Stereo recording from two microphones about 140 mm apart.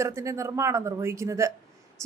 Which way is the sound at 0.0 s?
20° right (ahead or behind).